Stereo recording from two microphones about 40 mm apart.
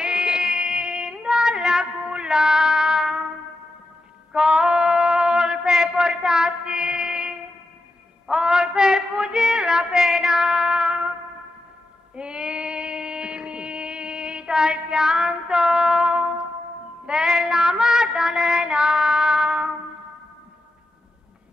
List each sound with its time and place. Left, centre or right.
0.0 s female singing: centre
4.3 s a sound: centre
12.2 s female singing: right
17.0 s child singing: right